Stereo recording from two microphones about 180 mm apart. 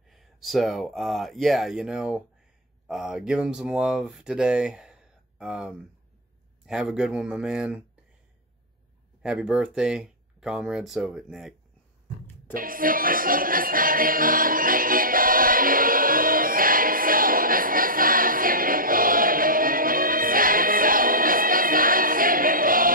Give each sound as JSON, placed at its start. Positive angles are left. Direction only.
{"t": 0.1, "sound": "speech", "side_deg": 0}
{"t": 9.2, "sound": "speech", "side_deg": -5}
{"t": 12.5, "sound": "music", "side_deg": -50}